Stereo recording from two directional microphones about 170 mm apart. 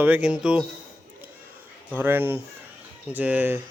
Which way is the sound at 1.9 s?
10° right (ahead or behind).